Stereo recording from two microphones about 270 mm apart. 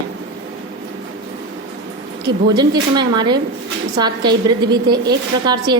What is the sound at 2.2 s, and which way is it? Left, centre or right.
A woman's voice, centre.